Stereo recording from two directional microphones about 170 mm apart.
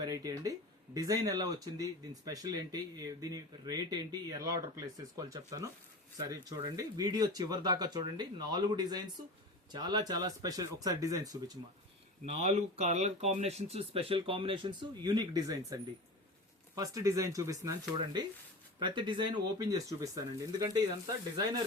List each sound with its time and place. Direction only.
0.0 s speech: 20° right (ahead or behind)
12.2 s speech: 40° right (ahead or behind)
16.7 s speech: 20° right (ahead or behind)